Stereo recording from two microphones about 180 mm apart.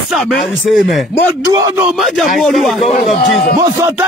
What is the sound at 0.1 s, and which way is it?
Speech, centre (ahead or behind).